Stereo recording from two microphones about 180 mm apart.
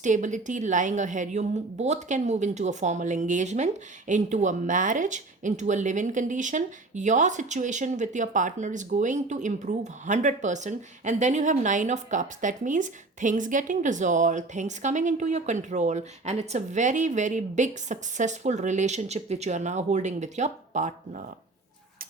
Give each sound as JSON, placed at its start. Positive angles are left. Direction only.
{"t": 0.0, "sound": "a woman's voice", "side_deg": -45}